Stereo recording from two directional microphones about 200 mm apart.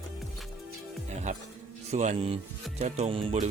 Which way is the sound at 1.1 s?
35° right (ahead or behind).